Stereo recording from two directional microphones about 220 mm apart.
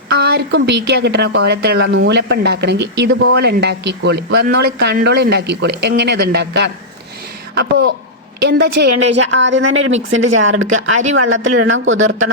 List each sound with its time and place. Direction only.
0.1 s a woman's voice: 45° right (ahead or behind)